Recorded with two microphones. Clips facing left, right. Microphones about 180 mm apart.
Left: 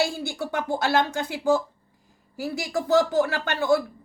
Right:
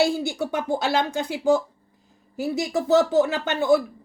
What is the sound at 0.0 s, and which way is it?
A woman's voice, 20° right (ahead or behind).